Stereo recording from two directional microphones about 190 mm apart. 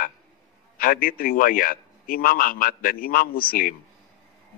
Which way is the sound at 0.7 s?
50° left (ahead or behind).